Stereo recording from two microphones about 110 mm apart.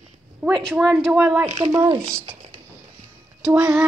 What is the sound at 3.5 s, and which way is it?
Speech, 15° right (ahead or behind).